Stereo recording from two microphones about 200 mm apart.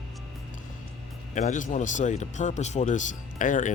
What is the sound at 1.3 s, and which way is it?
Speech, 35° left (ahead or behind).